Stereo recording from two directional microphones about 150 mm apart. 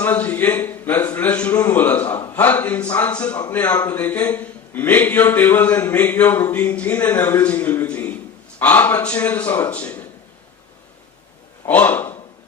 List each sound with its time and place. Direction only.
0.0 s a man's voice: 10° left (ahead or behind)
11.6 s speech: 10° left (ahead or behind)